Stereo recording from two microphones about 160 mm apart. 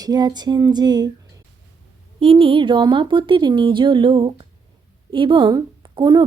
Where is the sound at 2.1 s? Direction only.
35° right (ahead or behind).